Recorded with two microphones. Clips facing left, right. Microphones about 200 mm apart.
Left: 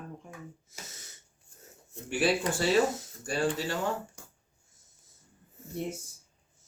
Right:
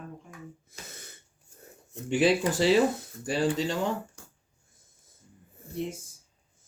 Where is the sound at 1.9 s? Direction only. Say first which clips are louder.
Right 4 dB; 20° right (ahead or behind).